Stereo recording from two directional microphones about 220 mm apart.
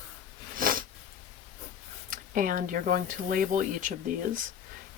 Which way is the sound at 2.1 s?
40° right (ahead or behind).